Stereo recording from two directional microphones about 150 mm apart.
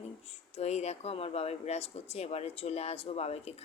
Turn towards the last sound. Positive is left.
turn(degrees=45)  # may be behind; listen again after turning